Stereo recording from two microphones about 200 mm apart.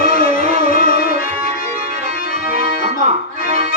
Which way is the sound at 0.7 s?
45° left (ahead or behind).